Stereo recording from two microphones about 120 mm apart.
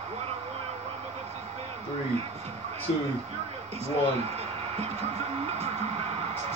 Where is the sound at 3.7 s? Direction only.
60° right (ahead or behind).